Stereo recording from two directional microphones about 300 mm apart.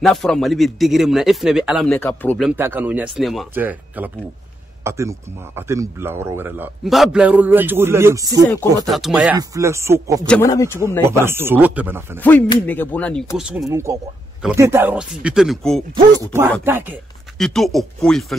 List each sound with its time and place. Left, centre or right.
0.0 s speech: centre
10.2 s speech: centre
10.8 s speech: centre
12.2 s speech: centre